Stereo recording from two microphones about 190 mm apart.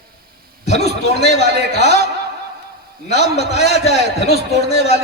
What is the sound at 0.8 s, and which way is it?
Speech, 35° left (ahead or behind).